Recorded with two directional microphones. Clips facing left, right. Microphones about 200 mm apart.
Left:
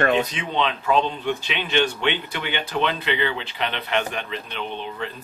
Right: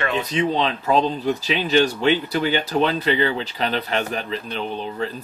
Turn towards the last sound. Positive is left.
turn(degrees=-35)  # may be behind; listen again after turning